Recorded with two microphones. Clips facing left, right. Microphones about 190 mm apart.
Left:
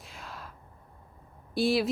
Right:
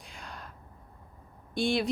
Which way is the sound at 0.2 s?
Centre (ahead or behind).